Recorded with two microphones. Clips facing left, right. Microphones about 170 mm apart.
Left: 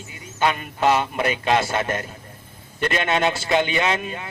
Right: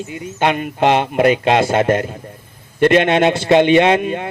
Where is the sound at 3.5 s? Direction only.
35° right (ahead or behind).